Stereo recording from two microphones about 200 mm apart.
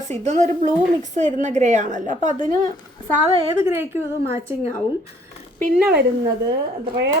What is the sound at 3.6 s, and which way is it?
Speech, 10° right (ahead or behind).